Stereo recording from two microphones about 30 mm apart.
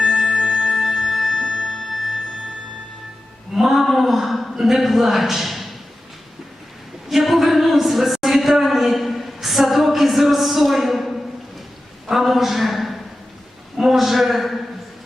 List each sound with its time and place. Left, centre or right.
0.0 s music: centre
0.4 s music: centre
0.7 s music: centre
1.4 s music: left
1.6 s music: centre
3.5 s a sound: centre
4.8 s a man's voice: centre
7.3 s a sound: centre
12.0 s a sound: centre